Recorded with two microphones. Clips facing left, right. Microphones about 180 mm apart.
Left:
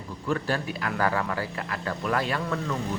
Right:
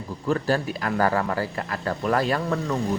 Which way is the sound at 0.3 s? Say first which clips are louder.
Right 4 dB; 40° right (ahead or behind).